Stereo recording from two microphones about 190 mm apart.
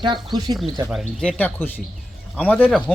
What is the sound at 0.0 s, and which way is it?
Speech, 25° right (ahead or behind).